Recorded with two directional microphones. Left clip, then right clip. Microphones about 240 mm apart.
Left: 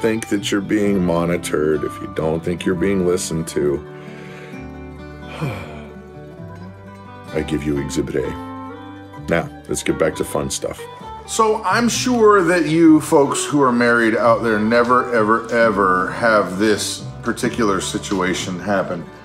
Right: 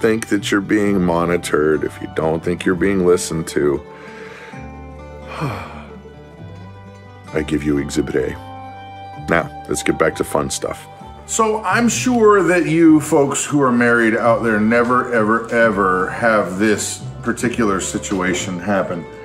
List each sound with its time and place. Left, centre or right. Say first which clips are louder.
0.0 s speech: right 2 dB; right
5.3 s music: right 3 dB; right
7.3 s speech: right 2 dB; right
11.3 s a man's voice: even; centre